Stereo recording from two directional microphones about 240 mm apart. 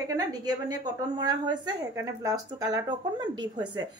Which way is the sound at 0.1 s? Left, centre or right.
Centre.